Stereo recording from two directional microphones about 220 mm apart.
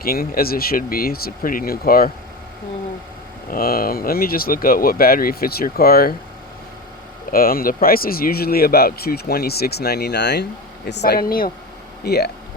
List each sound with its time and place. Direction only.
0.0 s speech: 45° left (ahead or behind)
3.5 s speech: 40° left (ahead or behind)
7.3 s speech: 40° left (ahead or behind)